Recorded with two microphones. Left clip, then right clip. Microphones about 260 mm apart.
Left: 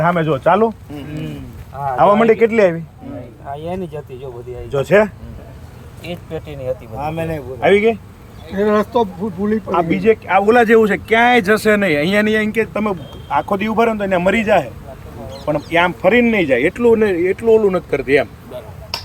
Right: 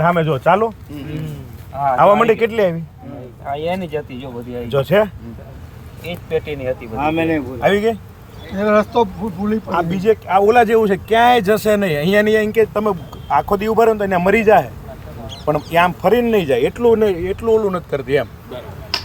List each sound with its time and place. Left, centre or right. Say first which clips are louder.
0.0 s a man's voice: even; right
2.0 s a man's voice: left 1 dB; right
3.5 s speech: right 4 dB; left
4.7 s a man's voice: left 2 dB; right
6.1 s speech: right 6 dB; left
7.6 s a man's voice: left 4 dB; right
8.5 s speech: right 1 dB; centre
9.7 s a man's voice: left 2 dB; right